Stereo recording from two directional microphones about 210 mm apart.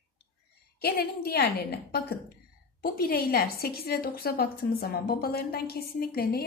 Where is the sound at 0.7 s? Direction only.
50° left (ahead or behind).